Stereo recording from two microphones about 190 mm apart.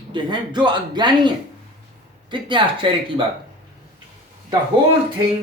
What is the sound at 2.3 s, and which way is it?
Speech, 25° right (ahead or behind).